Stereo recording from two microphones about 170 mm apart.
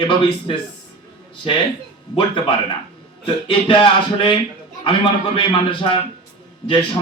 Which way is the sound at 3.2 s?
30° left (ahead or behind).